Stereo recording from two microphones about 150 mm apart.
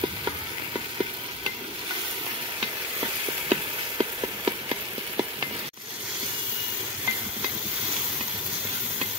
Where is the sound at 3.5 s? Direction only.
30° right (ahead or behind).